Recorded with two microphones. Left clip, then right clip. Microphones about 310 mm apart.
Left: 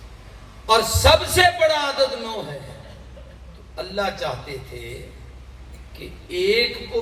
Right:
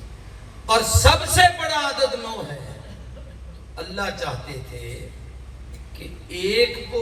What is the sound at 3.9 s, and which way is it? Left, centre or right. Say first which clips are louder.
Speech: left 3 dB; centre.